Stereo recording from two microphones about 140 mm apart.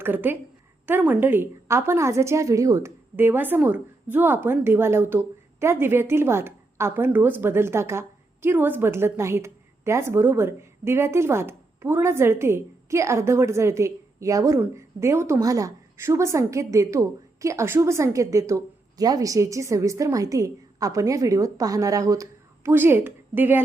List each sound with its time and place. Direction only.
0.0 s a woman's voice: 15° right (ahead or behind)